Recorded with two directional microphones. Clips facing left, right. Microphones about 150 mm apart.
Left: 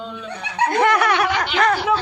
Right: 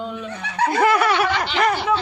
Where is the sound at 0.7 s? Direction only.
5° right (ahead or behind).